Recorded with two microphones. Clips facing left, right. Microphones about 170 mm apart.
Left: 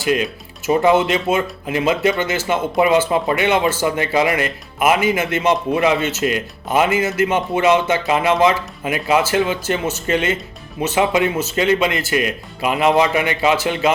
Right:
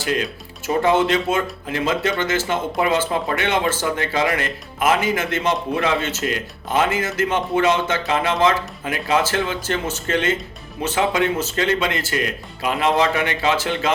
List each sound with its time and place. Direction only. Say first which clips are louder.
0.0 s speech: left 4 dB; 15° left (ahead or behind)